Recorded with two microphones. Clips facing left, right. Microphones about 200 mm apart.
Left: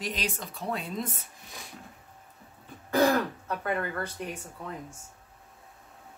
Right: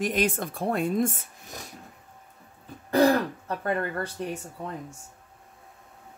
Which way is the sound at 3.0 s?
35° right (ahead or behind).